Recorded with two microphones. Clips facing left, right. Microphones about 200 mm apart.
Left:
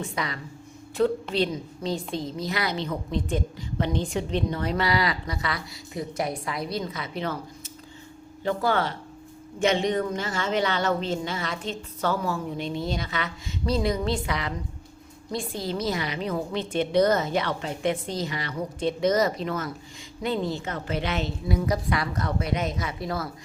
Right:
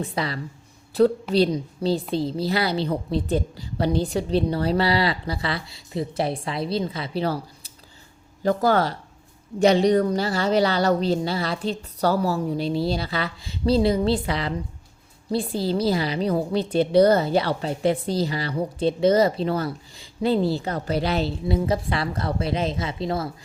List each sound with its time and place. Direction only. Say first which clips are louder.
0.0 s a woman's voice: right 4 dB; 30° right (ahead or behind)